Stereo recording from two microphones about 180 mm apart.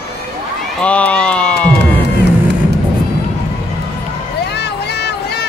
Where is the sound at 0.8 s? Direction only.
5° left (ahead or behind).